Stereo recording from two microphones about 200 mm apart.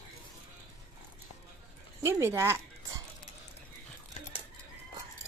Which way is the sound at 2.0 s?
10° right (ahead or behind).